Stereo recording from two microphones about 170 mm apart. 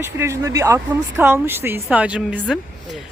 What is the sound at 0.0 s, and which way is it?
Speech, 15° right (ahead or behind).